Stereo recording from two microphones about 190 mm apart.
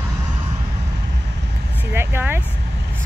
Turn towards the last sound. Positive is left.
turn(degrees=-10)  # may be behind; listen again after turning